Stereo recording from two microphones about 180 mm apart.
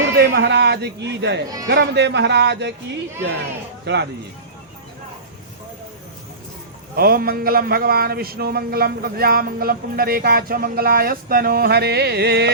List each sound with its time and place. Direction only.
0.2 s a man's voice: 65° right (ahead or behind)
3.8 s a man's voice: 65° right (ahead or behind)
6.9 s a man's voice: 55° right (ahead or behind)